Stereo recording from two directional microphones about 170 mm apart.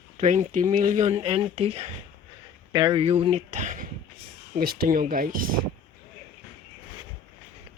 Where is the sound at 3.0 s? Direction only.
35° right (ahead or behind).